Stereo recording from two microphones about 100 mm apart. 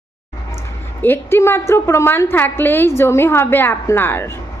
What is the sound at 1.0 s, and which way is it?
A woman's voice, 20° left (ahead or behind).